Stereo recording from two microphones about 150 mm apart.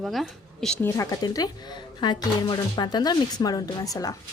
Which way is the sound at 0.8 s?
15° left (ahead or behind).